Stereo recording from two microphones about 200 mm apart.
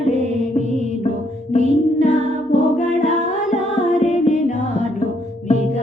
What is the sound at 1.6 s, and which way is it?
Music, 35° right (ahead or behind).